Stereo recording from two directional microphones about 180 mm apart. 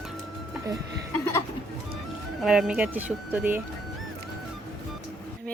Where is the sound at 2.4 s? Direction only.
Centre (ahead or behind).